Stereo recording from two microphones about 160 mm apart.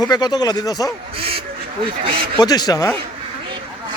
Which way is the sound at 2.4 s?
25° left (ahead or behind).